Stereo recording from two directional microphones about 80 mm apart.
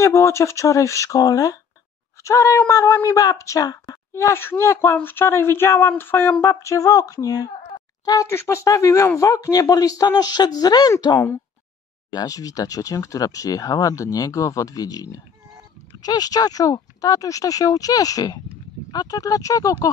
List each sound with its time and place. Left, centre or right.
0.0 s speech: left
4.1 s speech: left
6.5 s a woman's voice: left
8.3 s speech: left